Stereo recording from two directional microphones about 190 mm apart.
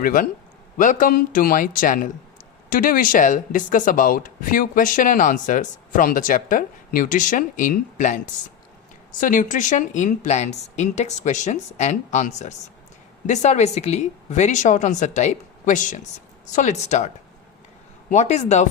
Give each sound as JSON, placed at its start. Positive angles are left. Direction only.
{"t": 0.0, "sound": "speech", "side_deg": 45}
{"t": 9.2, "sound": "speech", "side_deg": 40}
{"t": 18.1, "sound": "speech", "side_deg": 35}